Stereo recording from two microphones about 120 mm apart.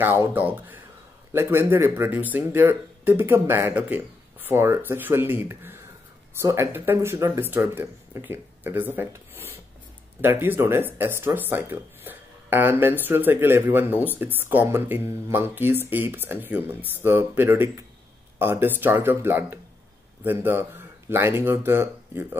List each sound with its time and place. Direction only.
0.0 s speech: 15° right (ahead or behind)